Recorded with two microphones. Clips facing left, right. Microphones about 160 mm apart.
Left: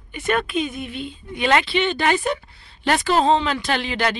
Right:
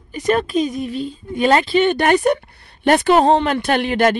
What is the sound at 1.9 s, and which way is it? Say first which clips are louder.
Speech: right 6 dB; 55° right (ahead or behind).